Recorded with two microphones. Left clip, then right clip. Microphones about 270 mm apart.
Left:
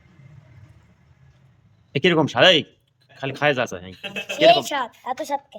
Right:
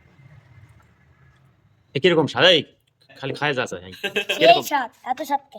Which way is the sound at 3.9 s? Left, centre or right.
Right.